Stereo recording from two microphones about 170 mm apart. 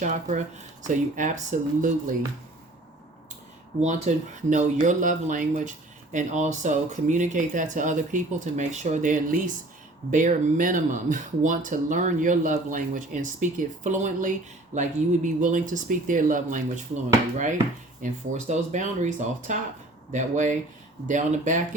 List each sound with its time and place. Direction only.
0.0 s speech: 45° right (ahead or behind)
3.8 s speech: 45° right (ahead or behind)
18.0 s speech: 45° right (ahead or behind)